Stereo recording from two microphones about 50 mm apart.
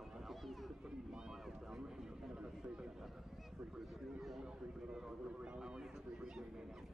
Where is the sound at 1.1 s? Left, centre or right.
Centre.